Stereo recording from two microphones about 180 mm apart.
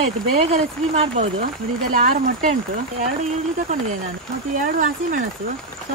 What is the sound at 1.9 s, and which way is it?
Speech, 50° right (ahead or behind).